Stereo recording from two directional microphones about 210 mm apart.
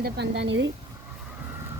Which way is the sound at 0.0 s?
55° right (ahead or behind).